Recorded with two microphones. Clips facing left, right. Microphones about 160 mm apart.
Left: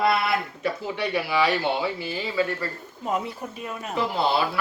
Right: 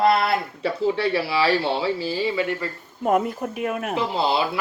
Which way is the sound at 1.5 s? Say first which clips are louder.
Right 3 dB; 15° left (ahead or behind).